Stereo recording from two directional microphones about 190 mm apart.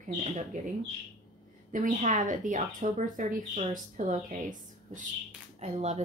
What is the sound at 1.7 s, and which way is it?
A woman's voice, 40° right (ahead or behind).